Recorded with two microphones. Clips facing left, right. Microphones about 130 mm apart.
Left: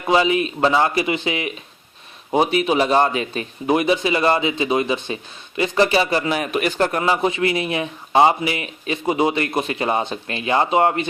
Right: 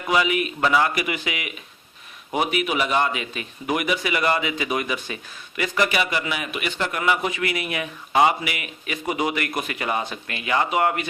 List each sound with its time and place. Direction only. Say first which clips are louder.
0.0 s speech: left 4 dB; 30° left (ahead or behind)
7.0 s speech: left 4 dB; 30° left (ahead or behind)